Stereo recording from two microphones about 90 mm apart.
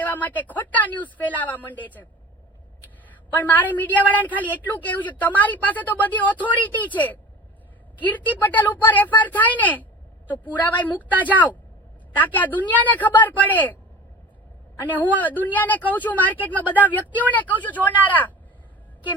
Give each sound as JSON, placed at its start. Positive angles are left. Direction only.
{"t": 0.0, "sound": "a woman's voice", "side_deg": 20}
{"t": 3.3, "sound": "a woman's voice", "side_deg": 20}
{"t": 14.9, "sound": "a woman's voice", "side_deg": 20}